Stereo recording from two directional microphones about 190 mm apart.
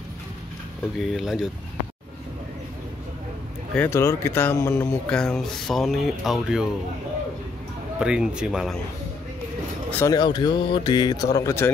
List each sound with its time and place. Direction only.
0.9 s speech: centre (ahead or behind)
3.7 s speech: 10° left (ahead or behind)
8.0 s speech: 5° right (ahead or behind)
9.8 s speech: 10° left (ahead or behind)
10.1 s speech: 20° left (ahead or behind)